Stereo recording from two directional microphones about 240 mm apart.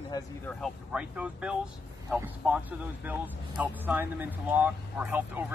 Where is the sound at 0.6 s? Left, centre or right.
Centre.